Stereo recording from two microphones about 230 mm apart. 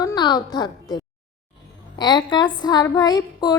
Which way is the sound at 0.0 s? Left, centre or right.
Centre.